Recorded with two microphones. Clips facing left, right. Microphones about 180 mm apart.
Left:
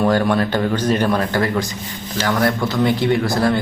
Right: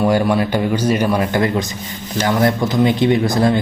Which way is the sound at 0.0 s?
10° right (ahead or behind).